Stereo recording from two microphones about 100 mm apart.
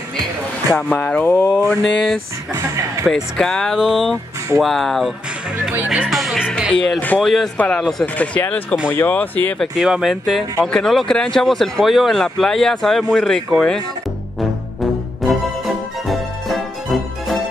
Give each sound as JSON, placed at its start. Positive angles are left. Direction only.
{"t": 0.7, "sound": "speech", "side_deg": 15}
{"t": 2.5, "sound": "speech", "side_deg": -30}
{"t": 3.3, "sound": "speech", "side_deg": 5}
{"t": 5.7, "sound": "speech", "side_deg": -10}
{"t": 6.0, "sound": "speech", "side_deg": 0}
{"t": 7.5, "sound": "speech", "side_deg": 15}
{"t": 9.6, "sound": "speech", "side_deg": -5}
{"t": 15.2, "sound": "music", "side_deg": 0}